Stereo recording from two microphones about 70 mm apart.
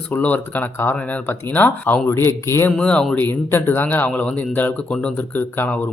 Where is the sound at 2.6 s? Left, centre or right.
Centre.